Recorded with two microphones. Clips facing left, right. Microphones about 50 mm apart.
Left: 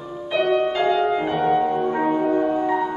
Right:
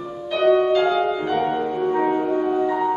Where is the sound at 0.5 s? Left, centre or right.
Left.